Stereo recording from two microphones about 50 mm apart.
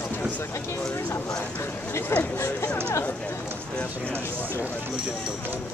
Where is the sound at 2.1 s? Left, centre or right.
Left.